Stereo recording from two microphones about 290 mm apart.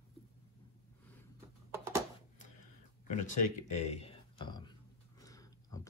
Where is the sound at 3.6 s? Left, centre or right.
Centre.